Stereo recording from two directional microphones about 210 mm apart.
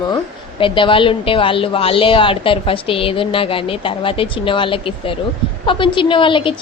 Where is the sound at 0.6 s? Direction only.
25° left (ahead or behind).